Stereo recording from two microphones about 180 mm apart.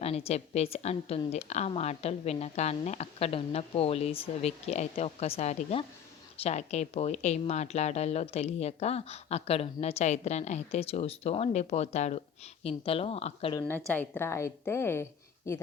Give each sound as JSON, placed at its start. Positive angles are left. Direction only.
{"t": 0.0, "sound": "speech", "side_deg": 35}
{"t": 13.7, "sound": "a woman's voice", "side_deg": 10}